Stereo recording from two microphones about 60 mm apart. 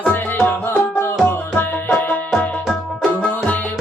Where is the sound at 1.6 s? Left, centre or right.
Left.